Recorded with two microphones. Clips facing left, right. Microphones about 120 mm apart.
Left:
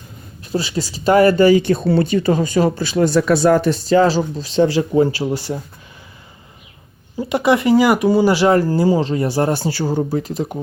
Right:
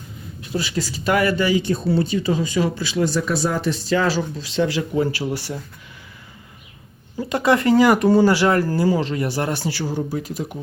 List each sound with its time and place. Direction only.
0.5 s speech: 30° left (ahead or behind)
1.6 s speech: 65° left (ahead or behind)
3.8 s speech: 35° left (ahead or behind)
7.2 s speech: 15° left (ahead or behind)
8.3 s speech: 20° left (ahead or behind)
9.5 s speech: 40° left (ahead or behind)